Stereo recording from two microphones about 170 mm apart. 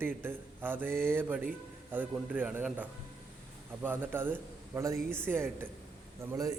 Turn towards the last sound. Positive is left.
turn(degrees=-20)  # may be behind; listen again after turning